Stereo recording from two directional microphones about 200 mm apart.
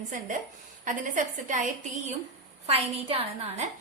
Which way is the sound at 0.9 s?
40° right (ahead or behind).